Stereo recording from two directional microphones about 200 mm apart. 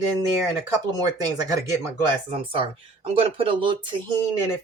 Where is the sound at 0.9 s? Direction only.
20° right (ahead or behind).